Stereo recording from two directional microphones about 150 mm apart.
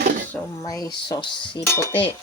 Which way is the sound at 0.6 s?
25° left (ahead or behind).